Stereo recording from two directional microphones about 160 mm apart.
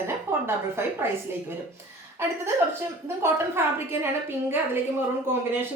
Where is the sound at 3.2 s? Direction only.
15° right (ahead or behind).